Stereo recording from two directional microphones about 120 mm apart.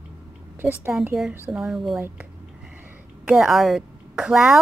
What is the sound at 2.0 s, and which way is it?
Speech, 15° right (ahead or behind).